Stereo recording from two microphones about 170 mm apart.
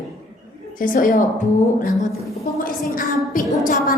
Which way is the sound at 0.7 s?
55° left (ahead or behind).